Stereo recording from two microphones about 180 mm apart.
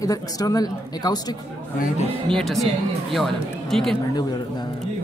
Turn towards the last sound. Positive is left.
turn(degrees=0)  # may be behind; listen again after turning